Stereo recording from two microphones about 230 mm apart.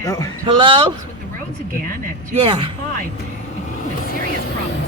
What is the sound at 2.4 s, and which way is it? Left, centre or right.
Speech, right.